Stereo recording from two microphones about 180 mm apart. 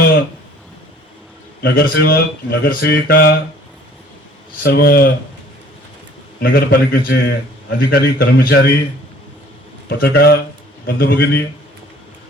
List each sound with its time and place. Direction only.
1.6 s speech: 60° left (ahead or behind)
4.6 s speech: 60° left (ahead or behind)
6.4 s speech: 60° left (ahead or behind)
9.9 s speech: 65° left (ahead or behind)